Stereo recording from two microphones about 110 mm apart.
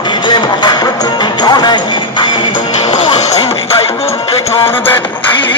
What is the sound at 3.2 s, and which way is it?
Music, 90° left.